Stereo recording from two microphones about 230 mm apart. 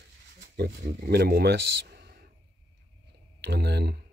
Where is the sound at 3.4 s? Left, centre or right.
Right.